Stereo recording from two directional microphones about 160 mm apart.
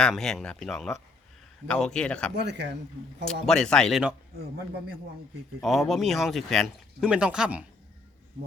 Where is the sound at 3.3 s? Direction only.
5° left (ahead or behind).